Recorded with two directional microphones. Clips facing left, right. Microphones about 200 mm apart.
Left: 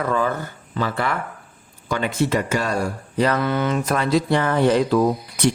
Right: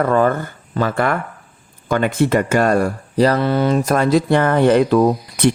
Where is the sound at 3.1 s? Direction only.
35° right (ahead or behind); by 5.5 s 60° right (ahead or behind).